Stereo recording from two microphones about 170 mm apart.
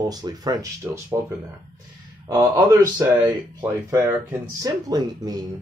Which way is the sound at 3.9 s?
10° right (ahead or behind).